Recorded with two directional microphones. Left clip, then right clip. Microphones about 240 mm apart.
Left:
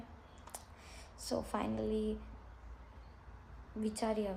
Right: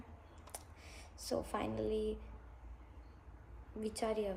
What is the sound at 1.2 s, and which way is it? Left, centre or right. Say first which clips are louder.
Speech: left 1 dB; centre.